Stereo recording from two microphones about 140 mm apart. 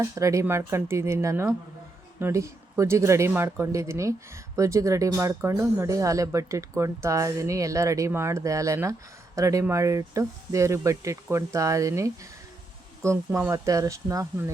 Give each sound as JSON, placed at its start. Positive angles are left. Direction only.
{"t": 0.0, "sound": "speech", "side_deg": -20}